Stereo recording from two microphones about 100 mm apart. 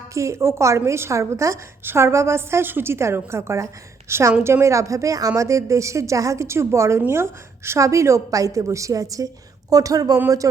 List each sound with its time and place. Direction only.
0.1 s a woman's voice: 30° right (ahead or behind)